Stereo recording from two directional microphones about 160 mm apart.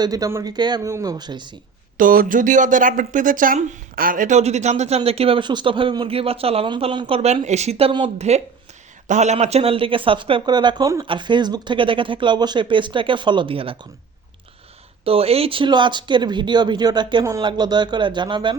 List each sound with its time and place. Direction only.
0.0 s speech: 25° right (ahead or behind)
2.0 s speech: 60° right (ahead or behind); by 7.2 s 30° right (ahead or behind)
7.2 s speech: 40° right (ahead or behind)
15.0 s speech: 35° right (ahead or behind)